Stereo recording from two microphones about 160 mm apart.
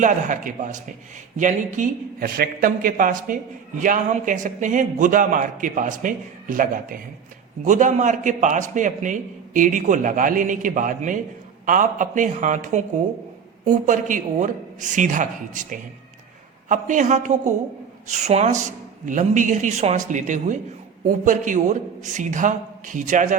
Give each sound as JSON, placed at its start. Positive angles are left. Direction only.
{"t": 0.0, "sound": "a man's voice", "side_deg": -50}